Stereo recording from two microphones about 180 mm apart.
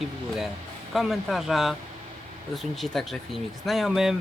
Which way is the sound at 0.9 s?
Centre (ahead or behind).